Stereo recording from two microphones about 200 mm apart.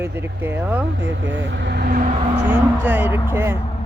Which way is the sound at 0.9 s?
60° right (ahead or behind).